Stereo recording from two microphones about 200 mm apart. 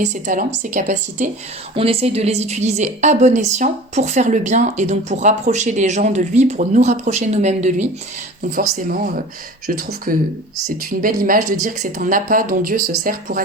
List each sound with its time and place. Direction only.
0.0 s a woman's voice: 40° right (ahead or behind)
1.7 s a woman's voice: 30° right (ahead or behind); by 13.4 s 45° right (ahead or behind)